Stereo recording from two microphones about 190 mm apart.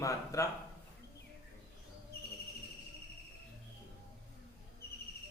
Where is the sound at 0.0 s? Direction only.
15° left (ahead or behind).